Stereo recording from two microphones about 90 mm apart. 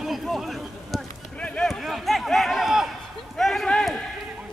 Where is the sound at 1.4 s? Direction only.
15° left (ahead or behind).